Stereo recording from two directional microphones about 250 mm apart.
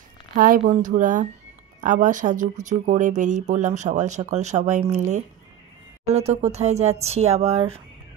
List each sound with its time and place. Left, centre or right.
0.4 s speech: right